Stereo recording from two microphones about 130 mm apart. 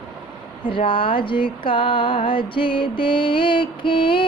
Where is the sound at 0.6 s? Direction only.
40° left (ahead or behind).